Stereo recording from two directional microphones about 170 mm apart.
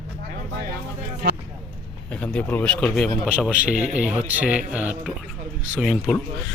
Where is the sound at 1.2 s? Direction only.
65° right (ahead or behind).